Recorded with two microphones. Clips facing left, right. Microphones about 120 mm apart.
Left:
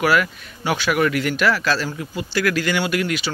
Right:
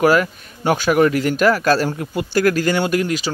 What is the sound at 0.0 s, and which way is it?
Speech, 40° right (ahead or behind).